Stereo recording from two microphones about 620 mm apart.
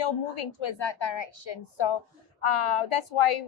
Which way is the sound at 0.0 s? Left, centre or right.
Left.